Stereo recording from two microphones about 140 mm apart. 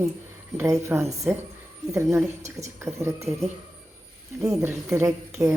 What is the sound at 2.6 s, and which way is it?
Speech, 20° right (ahead or behind).